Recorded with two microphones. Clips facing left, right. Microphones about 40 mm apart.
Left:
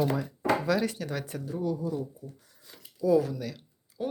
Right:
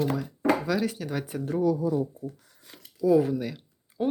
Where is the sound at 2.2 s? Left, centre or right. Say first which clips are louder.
Right 8 dB; right.